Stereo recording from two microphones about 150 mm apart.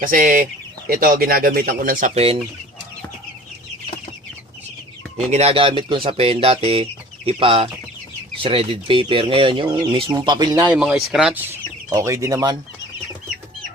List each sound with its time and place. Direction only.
0.0 s speech: 65° right (ahead or behind)
2.1 s speech: 40° right (ahead or behind)
5.1 s speech: 45° right (ahead or behind); by 10.5 s 30° right (ahead or behind)
10.9 s speech: 5° right (ahead or behind)
11.9 s speech: 20° right (ahead or behind)